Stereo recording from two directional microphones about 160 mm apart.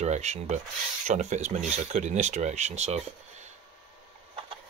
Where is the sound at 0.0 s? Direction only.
45° right (ahead or behind).